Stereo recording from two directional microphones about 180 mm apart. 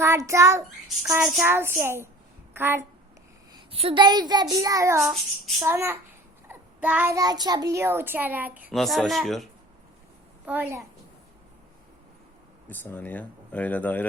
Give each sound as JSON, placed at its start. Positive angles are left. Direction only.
{"t": 0.0, "sound": "a child's voice", "side_deg": -15}
{"t": 3.5, "sound": "a child's voice", "side_deg": -30}
{"t": 12.6, "sound": "speech", "side_deg": 10}